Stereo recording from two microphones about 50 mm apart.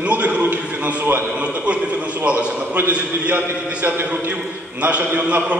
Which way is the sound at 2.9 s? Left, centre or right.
Right.